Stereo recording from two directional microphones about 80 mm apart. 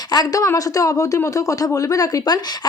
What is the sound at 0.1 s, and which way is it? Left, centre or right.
A woman's voice, left.